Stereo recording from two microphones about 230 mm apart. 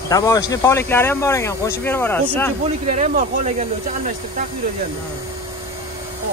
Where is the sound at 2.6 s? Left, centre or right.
Right.